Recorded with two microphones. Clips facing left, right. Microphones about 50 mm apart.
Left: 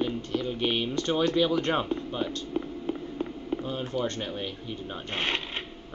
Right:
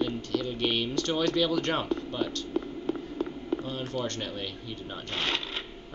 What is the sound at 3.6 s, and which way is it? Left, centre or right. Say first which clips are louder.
Speech: left 2 dB; centre.